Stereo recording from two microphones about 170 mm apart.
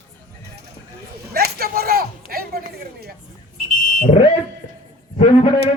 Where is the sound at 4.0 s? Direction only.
35° left (ahead or behind).